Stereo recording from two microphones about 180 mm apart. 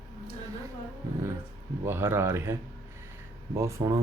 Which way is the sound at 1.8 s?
15° right (ahead or behind).